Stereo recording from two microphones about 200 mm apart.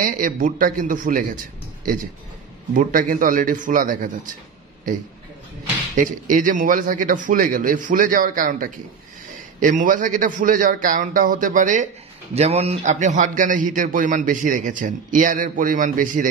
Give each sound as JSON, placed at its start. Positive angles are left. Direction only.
{"t": 0.0, "sound": "speech", "side_deg": -40}
{"t": 2.7, "sound": "speech", "side_deg": -45}
{"t": 5.9, "sound": "a man's voice", "side_deg": -40}